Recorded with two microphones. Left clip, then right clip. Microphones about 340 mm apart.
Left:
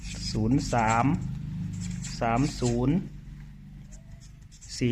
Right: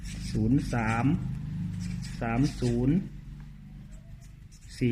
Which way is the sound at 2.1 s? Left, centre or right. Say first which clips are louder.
Left 4 dB; left.